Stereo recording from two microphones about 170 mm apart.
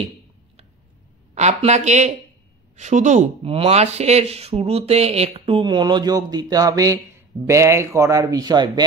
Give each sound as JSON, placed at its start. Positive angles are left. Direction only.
{"t": 1.3, "sound": "speech", "side_deg": -40}